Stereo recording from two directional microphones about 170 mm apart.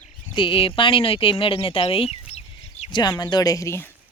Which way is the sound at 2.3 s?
40° left (ahead or behind).